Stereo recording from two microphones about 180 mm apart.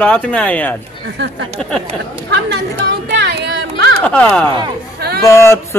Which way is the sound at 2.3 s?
65° right (ahead or behind).